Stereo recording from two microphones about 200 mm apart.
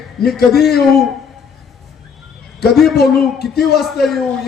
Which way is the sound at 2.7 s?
Centre (ahead or behind).